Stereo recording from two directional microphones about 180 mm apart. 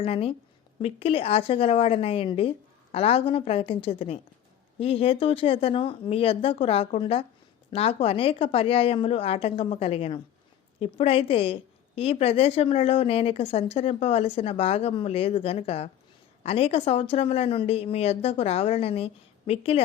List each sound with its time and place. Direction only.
0.0 s a woman's voice: 30° left (ahead or behind)